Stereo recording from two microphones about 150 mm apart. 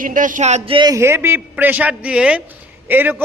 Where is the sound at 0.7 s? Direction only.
30° right (ahead or behind).